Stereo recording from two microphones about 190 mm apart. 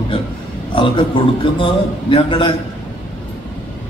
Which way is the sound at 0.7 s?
25° left (ahead or behind).